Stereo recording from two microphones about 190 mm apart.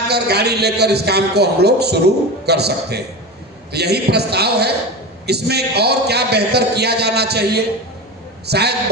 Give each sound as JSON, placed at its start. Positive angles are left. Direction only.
{"t": 0.1, "sound": "a man's voice", "side_deg": -60}